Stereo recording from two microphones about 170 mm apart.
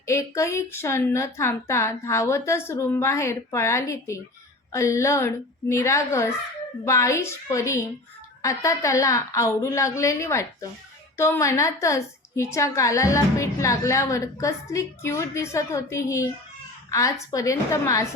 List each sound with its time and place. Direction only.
0.0 s a woman's voice: 15° left (ahead or behind)